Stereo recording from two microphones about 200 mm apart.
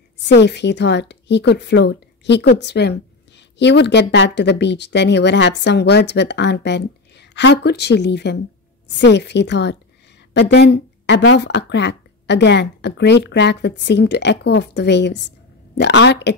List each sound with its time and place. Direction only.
0.3 s speech: 60° left (ahead or behind)